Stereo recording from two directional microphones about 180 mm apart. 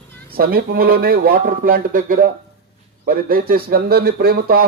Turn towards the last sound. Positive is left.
turn(degrees=-60)  # may be behind; listen again after turning